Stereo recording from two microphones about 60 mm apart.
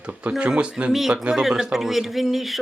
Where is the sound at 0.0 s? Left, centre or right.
Right.